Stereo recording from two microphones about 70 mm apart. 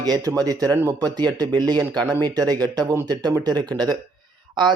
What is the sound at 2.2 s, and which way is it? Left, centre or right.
Speech, right.